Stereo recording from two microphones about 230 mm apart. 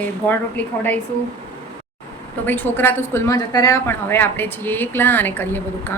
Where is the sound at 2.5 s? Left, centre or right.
Centre.